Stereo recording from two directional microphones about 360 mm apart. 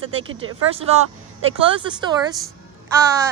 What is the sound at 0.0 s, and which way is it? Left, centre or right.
Speech, right.